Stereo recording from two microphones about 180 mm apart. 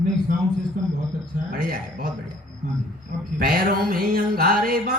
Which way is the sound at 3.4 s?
55° right (ahead or behind).